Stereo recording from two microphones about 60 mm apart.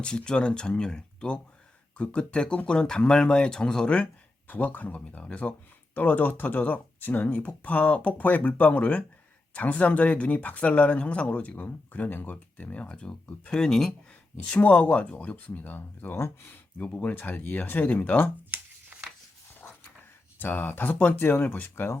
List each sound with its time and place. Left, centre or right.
0.0 s speech: centre
14.1 s speech: left
16.8 s speech: left
20.4 s speech: left